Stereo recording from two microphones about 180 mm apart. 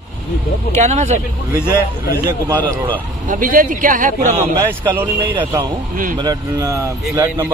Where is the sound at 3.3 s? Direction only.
50° right (ahead or behind).